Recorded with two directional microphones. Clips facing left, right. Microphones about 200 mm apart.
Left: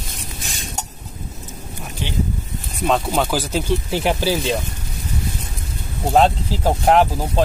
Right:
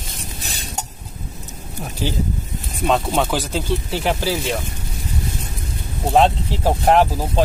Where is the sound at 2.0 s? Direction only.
40° right (ahead or behind).